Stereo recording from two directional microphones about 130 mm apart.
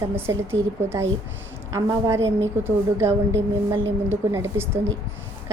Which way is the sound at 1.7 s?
25° right (ahead or behind).